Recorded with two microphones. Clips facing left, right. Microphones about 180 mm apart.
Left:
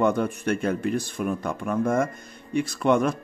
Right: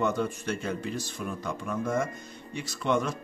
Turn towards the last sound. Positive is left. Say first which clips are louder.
# left 6 dB
turn(degrees=55)  # may be behind; listen again after turning